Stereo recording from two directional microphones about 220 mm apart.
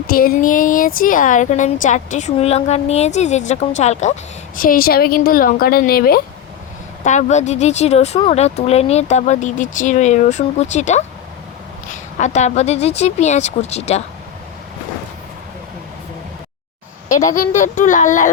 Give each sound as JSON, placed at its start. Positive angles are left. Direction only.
{"t": 0.1, "sound": "a woman's voice", "side_deg": 40}
{"t": 7.0, "sound": "a woman's voice", "side_deg": 35}
{"t": 12.1, "sound": "speech", "side_deg": 35}
{"t": 17.3, "sound": "a woman's voice", "side_deg": 35}